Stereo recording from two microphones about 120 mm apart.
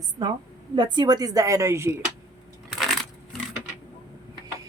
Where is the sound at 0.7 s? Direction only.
35° right (ahead or behind).